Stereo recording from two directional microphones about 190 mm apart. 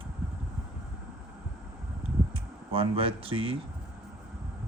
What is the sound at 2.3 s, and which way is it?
Speech, 30° right (ahead or behind).